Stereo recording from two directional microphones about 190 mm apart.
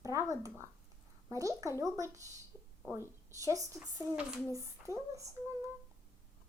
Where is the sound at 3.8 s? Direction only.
15° right (ahead or behind).